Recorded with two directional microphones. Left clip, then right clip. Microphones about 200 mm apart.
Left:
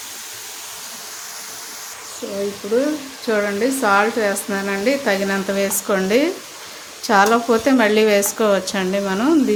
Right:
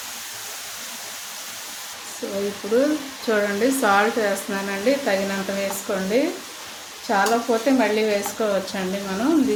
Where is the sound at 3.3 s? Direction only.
10° left (ahead or behind).